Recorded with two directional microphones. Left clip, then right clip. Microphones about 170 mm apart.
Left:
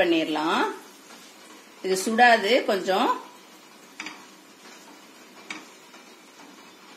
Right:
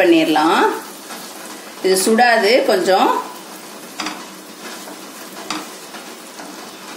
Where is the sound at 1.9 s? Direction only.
50° left (ahead or behind).